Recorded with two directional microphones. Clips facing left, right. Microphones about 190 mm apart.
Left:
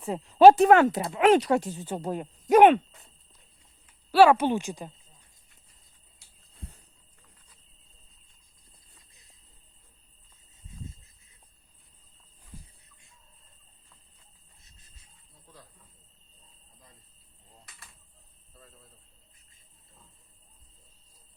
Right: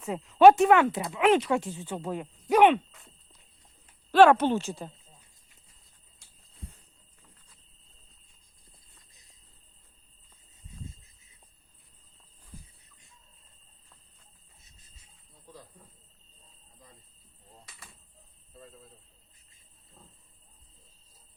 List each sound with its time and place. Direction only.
0.0 s speech: 30° left (ahead or behind)
4.1 s speech: 5° left (ahead or behind)